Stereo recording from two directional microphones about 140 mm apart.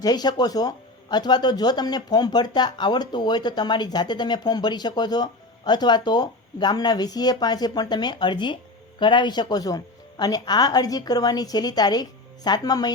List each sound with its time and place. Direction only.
0.0 s speech: 30° left (ahead or behind)